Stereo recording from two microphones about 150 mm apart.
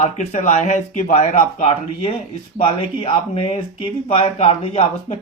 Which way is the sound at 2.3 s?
35° left (ahead or behind).